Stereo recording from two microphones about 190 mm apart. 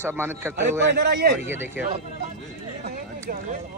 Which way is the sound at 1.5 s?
10° right (ahead or behind).